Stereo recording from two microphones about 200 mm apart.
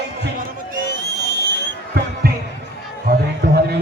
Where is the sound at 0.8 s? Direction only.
60° right (ahead or behind).